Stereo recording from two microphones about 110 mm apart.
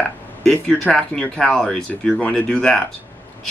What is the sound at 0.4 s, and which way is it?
Speech, 5° left (ahead or behind).